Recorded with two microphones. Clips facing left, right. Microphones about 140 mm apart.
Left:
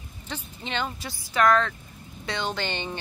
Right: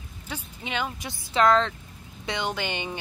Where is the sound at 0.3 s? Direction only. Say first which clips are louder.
Even; 10° right (ahead or behind).